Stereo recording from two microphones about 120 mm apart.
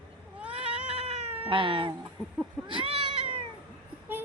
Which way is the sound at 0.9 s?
50° right (ahead or behind).